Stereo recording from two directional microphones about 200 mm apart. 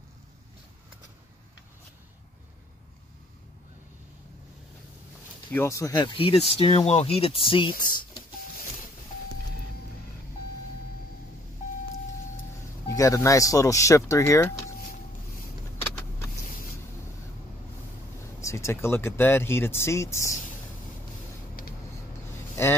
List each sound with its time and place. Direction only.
5.5 s speech: 15° left (ahead or behind)
11.6 s vehicle: 40° left (ahead or behind)
12.8 s speech: 15° left (ahead or behind)
18.4 s speech: 15° left (ahead or behind)
22.6 s a sound: 15° left (ahead or behind)